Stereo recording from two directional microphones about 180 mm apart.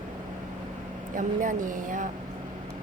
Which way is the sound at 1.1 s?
45° right (ahead or behind).